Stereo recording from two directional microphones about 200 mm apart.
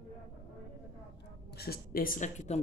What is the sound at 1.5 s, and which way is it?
A woman's voice, 50° left (ahead or behind).